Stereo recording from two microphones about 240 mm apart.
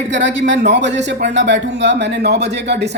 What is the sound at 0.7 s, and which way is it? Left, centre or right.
Speech, right.